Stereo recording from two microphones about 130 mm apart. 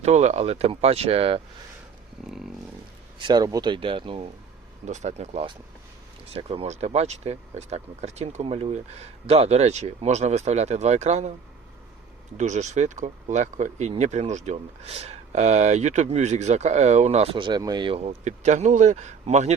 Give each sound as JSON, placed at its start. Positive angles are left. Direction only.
{"t": 0.0, "sound": "speech", "side_deg": -60}
{"t": 3.2, "sound": "speech", "side_deg": -35}
{"t": 4.9, "sound": "speech", "side_deg": -65}
{"t": 12.4, "sound": "speech", "side_deg": -65}
{"t": 17.3, "sound": "speech", "side_deg": -40}
{"t": 18.0, "sound": "speech", "side_deg": -60}